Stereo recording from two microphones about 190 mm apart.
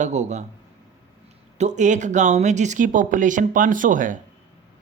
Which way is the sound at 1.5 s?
35° right (ahead or behind).